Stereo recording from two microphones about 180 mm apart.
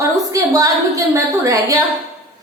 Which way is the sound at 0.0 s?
20° right (ahead or behind).